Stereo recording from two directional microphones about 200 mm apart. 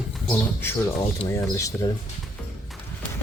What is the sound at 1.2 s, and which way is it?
Speech, 25° left (ahead or behind).